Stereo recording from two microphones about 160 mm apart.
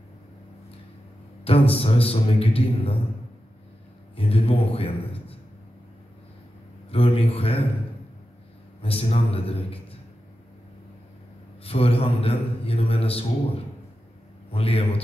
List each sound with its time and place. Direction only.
1.4 s a man's voice: 35° left (ahead or behind)
4.2 s a man's voice: 35° left (ahead or behind)
6.9 s a man's voice: 35° left (ahead or behind)
8.8 s a man's voice: 35° left (ahead or behind)
11.6 s a man's voice: 35° left (ahead or behind)
14.5 s a man's voice: 35° left (ahead or behind)